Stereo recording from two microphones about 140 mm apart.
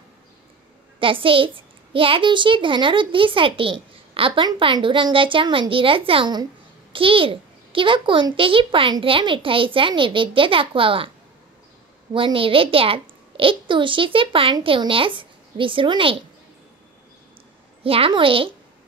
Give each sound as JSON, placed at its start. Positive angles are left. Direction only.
{"t": 0.9, "sound": "a child's voice", "side_deg": -40}
{"t": 12.1, "sound": "a child's voice", "side_deg": -40}
{"t": 17.8, "sound": "a child's voice", "side_deg": -40}